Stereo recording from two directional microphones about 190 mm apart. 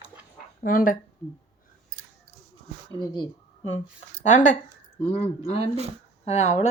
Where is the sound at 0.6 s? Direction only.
50° left (ahead or behind).